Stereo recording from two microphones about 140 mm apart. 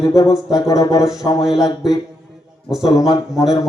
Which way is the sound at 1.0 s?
5° right (ahead or behind).